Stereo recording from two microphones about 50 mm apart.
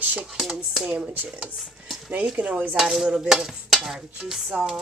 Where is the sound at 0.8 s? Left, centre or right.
Centre.